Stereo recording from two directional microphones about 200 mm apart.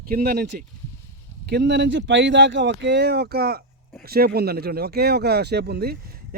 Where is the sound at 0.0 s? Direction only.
50° right (ahead or behind).